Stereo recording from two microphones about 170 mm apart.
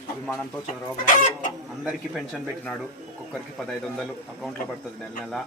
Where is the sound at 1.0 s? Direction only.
50° left (ahead or behind).